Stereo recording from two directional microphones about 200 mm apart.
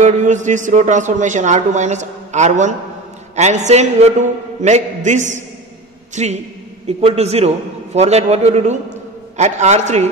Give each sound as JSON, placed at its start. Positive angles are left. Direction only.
{"t": 0.0, "sound": "a man's voice", "side_deg": -35}